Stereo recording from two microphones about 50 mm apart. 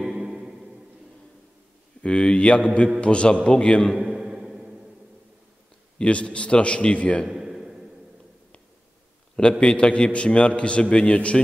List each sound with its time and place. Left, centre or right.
0.0 s music: centre
2.0 s a man's voice: left
4.1 s music: centre
5.9 s a man's voice: left
7.2 s a sound: centre
9.4 s a man's voice: centre